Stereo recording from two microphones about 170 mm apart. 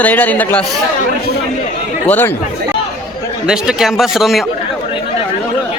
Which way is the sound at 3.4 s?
5° right (ahead or behind).